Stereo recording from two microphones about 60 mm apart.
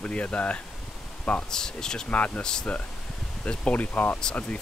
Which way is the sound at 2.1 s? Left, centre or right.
Left.